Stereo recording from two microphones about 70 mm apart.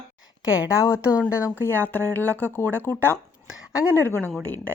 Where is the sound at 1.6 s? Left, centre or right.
Left.